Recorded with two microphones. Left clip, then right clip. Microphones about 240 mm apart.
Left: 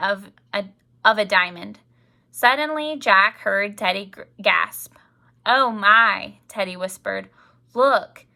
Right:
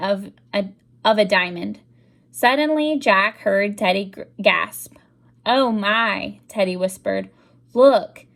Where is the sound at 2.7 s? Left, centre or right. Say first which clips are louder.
Even; centre.